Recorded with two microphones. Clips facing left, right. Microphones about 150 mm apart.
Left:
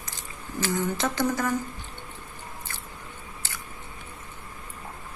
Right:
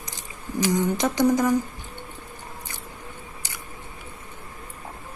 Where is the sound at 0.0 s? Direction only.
15° right (ahead or behind).